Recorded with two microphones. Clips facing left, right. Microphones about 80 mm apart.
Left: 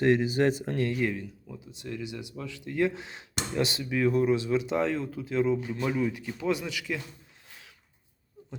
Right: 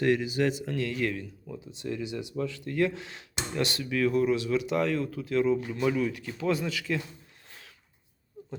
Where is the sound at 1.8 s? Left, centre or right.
Centre.